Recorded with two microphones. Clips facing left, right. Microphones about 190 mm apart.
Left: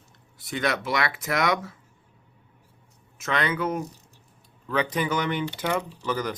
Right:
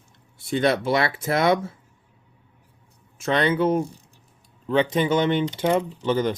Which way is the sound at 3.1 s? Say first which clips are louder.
Right 6 dB; 30° right (ahead or behind).